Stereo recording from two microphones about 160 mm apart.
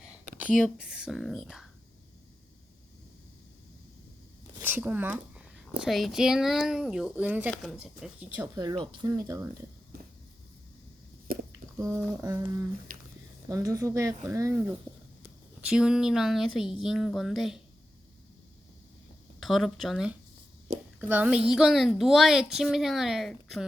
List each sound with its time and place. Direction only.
0.3 s speech: 5° right (ahead or behind)
4.6 s speech: 10° right (ahead or behind)
8.4 s speech: 25° right (ahead or behind)
11.3 s a sound: 65° right (ahead or behind)
11.9 s speech: 5° right (ahead or behind)
12.9 s squish: 65° right (ahead or behind)
13.5 s speech: 20° right (ahead or behind); by 17.6 s centre (ahead or behind)
19.4 s speech: centre (ahead or behind)